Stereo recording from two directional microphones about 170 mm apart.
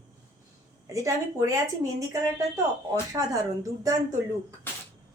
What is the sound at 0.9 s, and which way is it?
A woman's voice, 20° right (ahead or behind).